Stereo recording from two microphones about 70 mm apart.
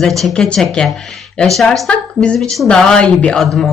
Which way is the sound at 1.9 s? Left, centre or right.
Centre.